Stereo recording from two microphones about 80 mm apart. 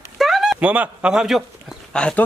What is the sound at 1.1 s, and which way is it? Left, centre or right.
Speech, centre.